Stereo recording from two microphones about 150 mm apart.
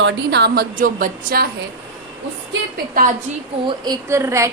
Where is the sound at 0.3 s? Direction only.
90° right; by 1.5 s 75° right (ahead or behind).